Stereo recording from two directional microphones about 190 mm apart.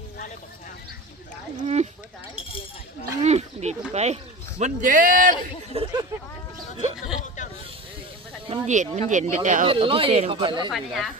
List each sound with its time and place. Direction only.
1.5 s speech: 35° right (ahead or behind)
2.3 s chink: 30° left (ahead or behind)
3.2 s speech: 35° right (ahead or behind)
5.7 s speech: 25° right (ahead or behind)
8.4 s speech: 40° right (ahead or behind)
9.6 s speech: 30° right (ahead or behind)
10.7 s speech: centre (ahead or behind)